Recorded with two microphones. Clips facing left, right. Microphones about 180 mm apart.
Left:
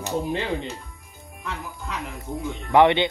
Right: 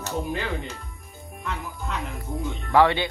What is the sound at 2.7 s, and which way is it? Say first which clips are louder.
Speech: left 3 dB; 20° left (ahead or behind).